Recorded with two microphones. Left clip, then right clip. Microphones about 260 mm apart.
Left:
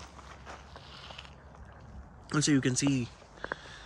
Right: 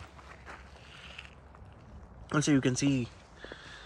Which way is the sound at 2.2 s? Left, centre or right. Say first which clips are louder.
Even; centre.